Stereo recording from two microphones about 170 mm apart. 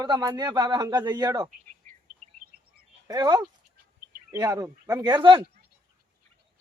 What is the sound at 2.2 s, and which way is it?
Bird vocalization, 40° right (ahead or behind).